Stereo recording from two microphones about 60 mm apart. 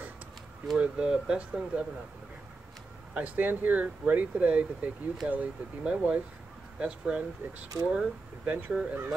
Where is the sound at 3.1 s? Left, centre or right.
Right.